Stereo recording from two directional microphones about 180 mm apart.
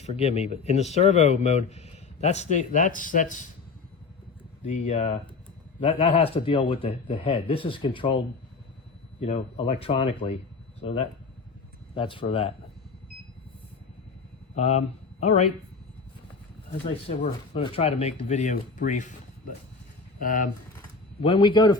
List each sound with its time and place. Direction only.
0.0 s speech: 35° left (ahead or behind)
4.6 s speech: 40° left (ahead or behind)
9.2 s speech: 35° left (ahead or behind)
11.9 s speech: 30° left (ahead or behind)
14.5 s speech: 35° left (ahead or behind)
16.8 s speech: 35° left (ahead or behind)
20.1 s speech: 50° left (ahead or behind)
21.2 s speech: 30° left (ahead or behind)